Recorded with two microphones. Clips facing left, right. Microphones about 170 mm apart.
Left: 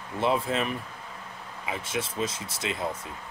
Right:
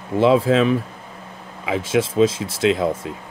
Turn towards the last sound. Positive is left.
turn(degrees=-90)